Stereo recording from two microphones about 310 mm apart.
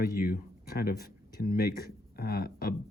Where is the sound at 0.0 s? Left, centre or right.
Left.